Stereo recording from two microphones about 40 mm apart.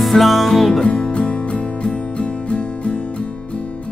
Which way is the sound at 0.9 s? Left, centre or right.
Left.